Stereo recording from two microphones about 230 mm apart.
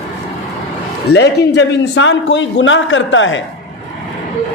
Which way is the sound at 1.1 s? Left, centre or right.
Left.